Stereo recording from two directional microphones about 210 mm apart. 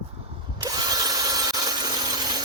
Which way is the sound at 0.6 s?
20° right (ahead or behind).